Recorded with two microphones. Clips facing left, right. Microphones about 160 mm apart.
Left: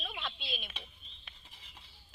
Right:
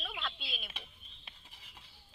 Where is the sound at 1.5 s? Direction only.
10° right (ahead or behind).